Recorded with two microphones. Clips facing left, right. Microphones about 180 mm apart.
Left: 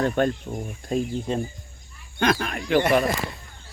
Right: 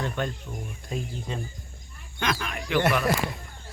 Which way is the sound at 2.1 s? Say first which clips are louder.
Left 7 dB; 40° left (ahead or behind).